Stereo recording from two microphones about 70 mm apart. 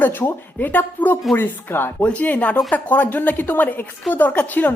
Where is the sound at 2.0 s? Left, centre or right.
Centre.